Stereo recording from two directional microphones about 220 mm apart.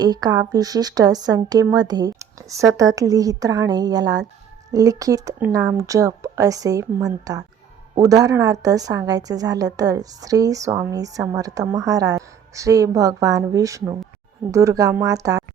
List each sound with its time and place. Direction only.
0.0 s a woman's voice: 20° right (ahead or behind)